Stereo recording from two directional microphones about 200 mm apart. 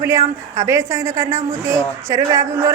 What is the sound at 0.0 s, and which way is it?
Speech, 15° right (ahead or behind).